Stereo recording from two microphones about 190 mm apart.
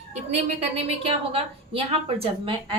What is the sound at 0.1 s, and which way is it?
A woman's voice, 35° right (ahead or behind).